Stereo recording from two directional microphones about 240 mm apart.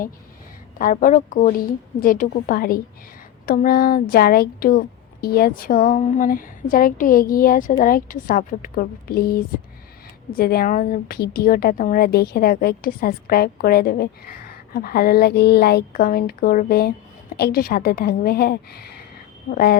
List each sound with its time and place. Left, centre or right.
0.8 s a woman's voice: left